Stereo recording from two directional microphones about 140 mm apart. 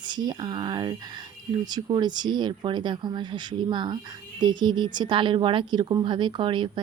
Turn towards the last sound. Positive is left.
turn(degrees=-35)  # may be behind; listen again after turning